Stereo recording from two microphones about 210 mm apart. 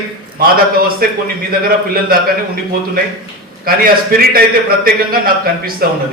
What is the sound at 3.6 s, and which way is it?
A man's voice, 45° right (ahead or behind).